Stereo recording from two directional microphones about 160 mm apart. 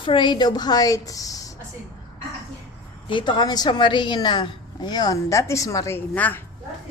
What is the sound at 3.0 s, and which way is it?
A woman's voice, 30° left (ahead or behind).